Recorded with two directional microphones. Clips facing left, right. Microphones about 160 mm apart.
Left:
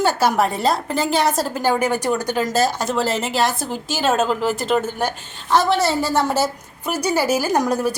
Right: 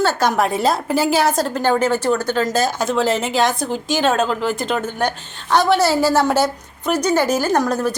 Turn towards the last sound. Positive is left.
turn(degrees=10)  # may be behind; listen again after turning